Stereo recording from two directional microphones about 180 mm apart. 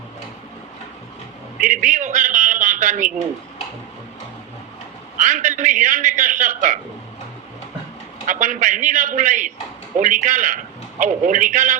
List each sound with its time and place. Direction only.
1.5 s a man's voice: 45° right (ahead or behind)
5.2 s a man's voice: 45° right (ahead or behind)
8.3 s a man's voice: 45° right (ahead or behind)